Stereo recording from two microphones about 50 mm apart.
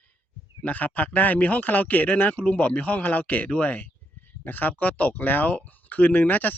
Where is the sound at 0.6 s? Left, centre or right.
Left.